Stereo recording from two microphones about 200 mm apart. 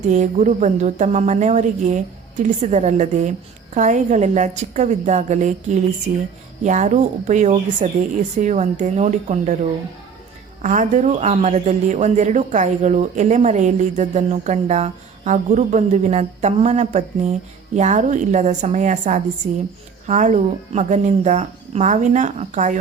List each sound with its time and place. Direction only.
0.1 s speech: 35° right (ahead or behind)
10.6 s speech: 40° right (ahead or behind)